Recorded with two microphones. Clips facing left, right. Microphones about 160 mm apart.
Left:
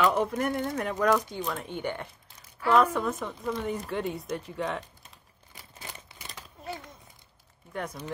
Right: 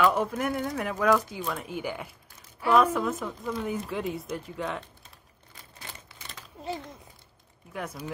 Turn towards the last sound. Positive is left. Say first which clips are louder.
# left 1 dB
turn(degrees=-5)  # may be behind; listen again after turning